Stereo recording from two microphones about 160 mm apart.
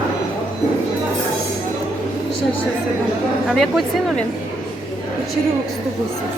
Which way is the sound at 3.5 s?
Centre (ahead or behind).